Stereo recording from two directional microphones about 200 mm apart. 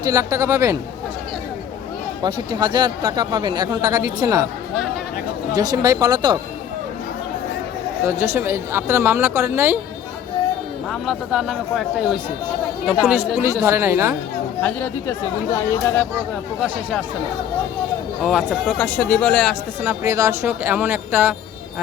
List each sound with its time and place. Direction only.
0.1 s speech: 15° right (ahead or behind)
2.2 s speech: 25° right (ahead or behind)
5.5 s speech: 20° right (ahead or behind)
8.0 s speech: 15° right (ahead or behind)
11.0 s speech: centre (ahead or behind)
14.6 s speech: 10° left (ahead or behind)
18.2 s speech: centre (ahead or behind)
19.9 s speech: 15° right (ahead or behind)